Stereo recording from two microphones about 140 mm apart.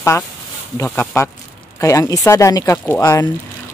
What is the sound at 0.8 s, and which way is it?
Speech, 20° left (ahead or behind).